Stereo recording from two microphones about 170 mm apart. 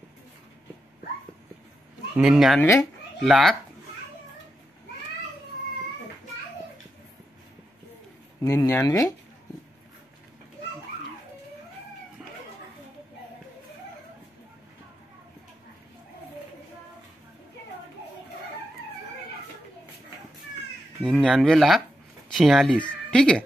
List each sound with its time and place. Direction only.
2.1 s speech: 5° right (ahead or behind)
2.6 s speech: 15° left (ahead or behind)
3.2 s speech: centre (ahead or behind)
8.4 s speech: 15° left (ahead or behind)
21.0 s speech: 5° left (ahead or behind)